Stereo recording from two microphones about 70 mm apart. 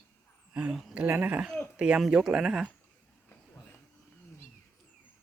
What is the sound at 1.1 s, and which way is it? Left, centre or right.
Speech, right.